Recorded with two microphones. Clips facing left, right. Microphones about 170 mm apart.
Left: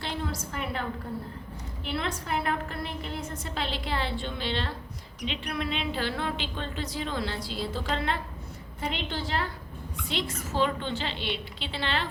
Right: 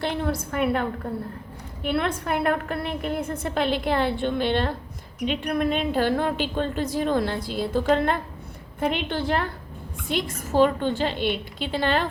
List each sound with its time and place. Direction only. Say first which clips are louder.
0.0 s a woman's voice: right 7 dB; 60° right (ahead or behind)